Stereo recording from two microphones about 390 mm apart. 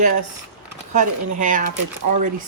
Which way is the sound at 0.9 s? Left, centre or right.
Centre.